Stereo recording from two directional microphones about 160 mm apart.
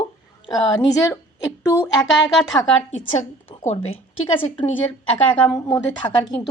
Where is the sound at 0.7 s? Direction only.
20° left (ahead or behind).